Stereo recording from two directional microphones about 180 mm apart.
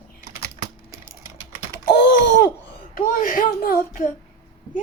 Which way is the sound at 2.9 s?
50° left (ahead or behind).